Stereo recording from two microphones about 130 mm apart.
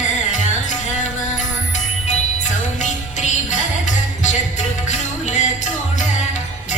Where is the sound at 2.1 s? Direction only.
65° left (ahead or behind).